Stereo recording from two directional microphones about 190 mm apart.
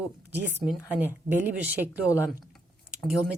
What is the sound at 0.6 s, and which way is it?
Speech, 10° right (ahead or behind).